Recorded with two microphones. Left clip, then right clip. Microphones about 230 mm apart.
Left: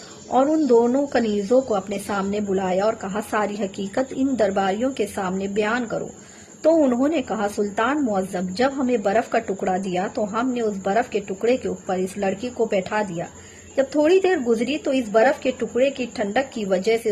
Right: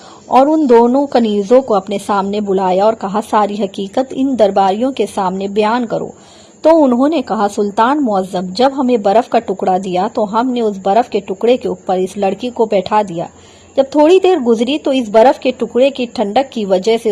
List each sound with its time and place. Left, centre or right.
0.3 s a woman's voice: right